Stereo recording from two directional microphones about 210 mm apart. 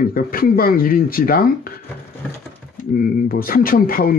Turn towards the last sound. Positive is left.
turn(degrees=45)  # may be behind; listen again after turning